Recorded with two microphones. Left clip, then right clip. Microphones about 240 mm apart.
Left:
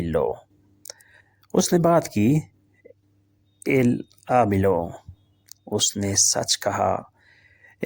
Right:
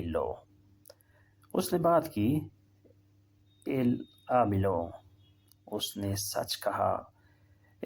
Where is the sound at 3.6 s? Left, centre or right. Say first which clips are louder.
Left 10 dB; left.